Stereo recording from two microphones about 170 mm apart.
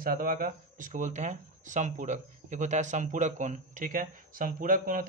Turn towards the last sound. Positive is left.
turn(degrees=-55)  # may be behind; listen again after turning